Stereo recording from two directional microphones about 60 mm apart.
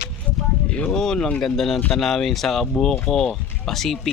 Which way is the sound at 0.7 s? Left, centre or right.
Left.